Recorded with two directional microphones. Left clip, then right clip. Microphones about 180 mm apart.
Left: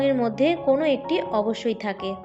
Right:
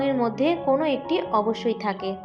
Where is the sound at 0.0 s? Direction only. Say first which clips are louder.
Left 2 dB; 30° left (ahead or behind).